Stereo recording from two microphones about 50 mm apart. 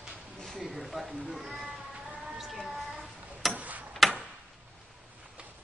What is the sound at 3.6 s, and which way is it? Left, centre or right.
Tick-tock, right.